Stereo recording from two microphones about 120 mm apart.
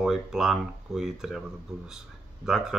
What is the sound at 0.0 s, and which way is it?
Speech, 5° right (ahead or behind).